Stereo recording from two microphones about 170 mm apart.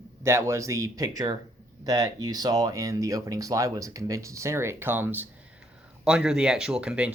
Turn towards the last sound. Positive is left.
turn(degrees=-5)  # may be behind; listen again after turning